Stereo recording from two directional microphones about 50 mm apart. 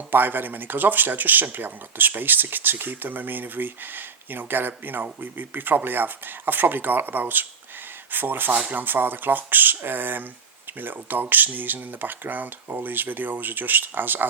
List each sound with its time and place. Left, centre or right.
0.1 s speech: right